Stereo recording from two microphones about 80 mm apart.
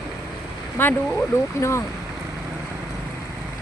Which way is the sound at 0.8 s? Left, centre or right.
Left.